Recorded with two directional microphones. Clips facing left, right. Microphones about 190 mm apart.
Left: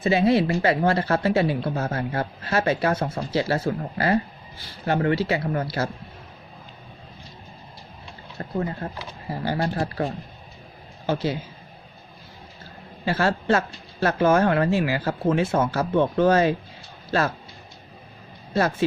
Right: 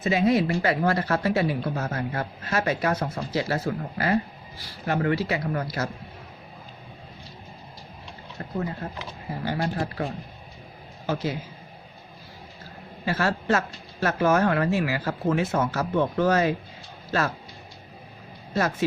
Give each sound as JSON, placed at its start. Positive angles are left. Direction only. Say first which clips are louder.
{"t": 0.0, "sound": "a woman's voice", "louder": "left 2 dB", "side_deg": 30}
{"t": 8.4, "sound": "a man's voice", "louder": "left 3 dB", "side_deg": 35}
{"t": 13.1, "sound": "a woman's voice", "louder": "left 3 dB", "side_deg": 30}
{"t": 18.5, "sound": "a woman's voice", "louder": "left 3 dB", "side_deg": 30}